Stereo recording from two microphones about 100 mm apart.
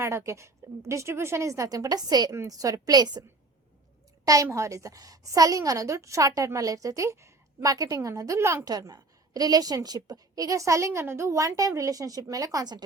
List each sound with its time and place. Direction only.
0.0 s a woman's voice: 25° right (ahead or behind); by 2.3 s 40° right (ahead or behind)
2.3 s a woman's voice: 30° right (ahead or behind)
4.4 s a woman's voice: 30° right (ahead or behind)
8.6 s a woman's voice: 40° right (ahead or behind)